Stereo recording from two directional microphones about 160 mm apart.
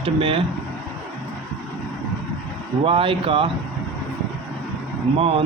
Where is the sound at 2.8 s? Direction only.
35° right (ahead or behind).